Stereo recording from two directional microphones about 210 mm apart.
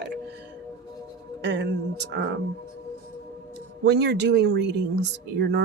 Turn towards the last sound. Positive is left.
turn(degrees=-55)  # may be behind; listen again after turning